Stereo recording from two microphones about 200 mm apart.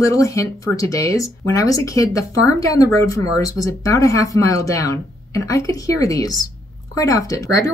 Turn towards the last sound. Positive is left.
turn(degrees=15)  # may be behind; listen again after turning